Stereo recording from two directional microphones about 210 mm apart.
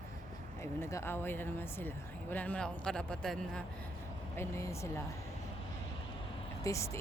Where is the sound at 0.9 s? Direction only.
10° left (ahead or behind).